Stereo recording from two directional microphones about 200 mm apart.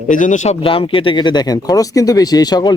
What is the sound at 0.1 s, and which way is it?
Speech, 40° left (ahead or behind).